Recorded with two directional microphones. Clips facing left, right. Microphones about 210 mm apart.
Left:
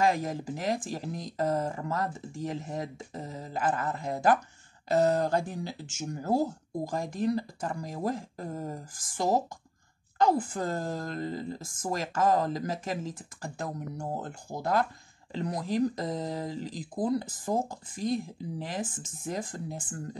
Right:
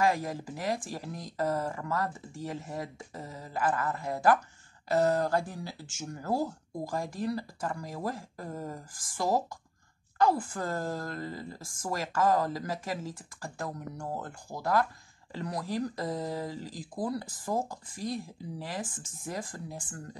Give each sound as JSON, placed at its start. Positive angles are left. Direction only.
{"t": 0.0, "sound": "a woman's voice", "side_deg": 20}